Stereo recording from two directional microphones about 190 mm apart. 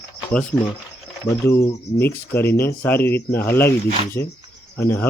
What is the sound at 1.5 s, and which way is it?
Speech, 15° left (ahead or behind).